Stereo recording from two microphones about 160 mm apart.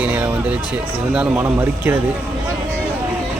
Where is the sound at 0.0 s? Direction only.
10° right (ahead or behind).